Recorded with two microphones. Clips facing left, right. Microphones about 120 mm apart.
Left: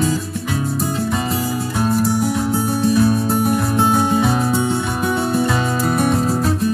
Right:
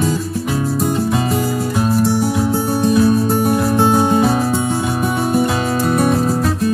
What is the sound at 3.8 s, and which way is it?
Music, 25° right (ahead or behind).